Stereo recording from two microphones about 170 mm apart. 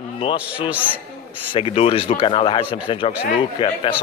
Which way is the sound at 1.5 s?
35° left (ahead or behind).